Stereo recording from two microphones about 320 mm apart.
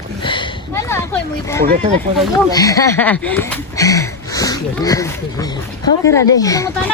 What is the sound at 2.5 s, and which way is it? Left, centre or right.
Speech, centre.